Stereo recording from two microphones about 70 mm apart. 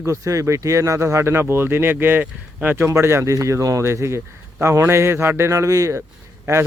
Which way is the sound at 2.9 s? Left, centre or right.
Right.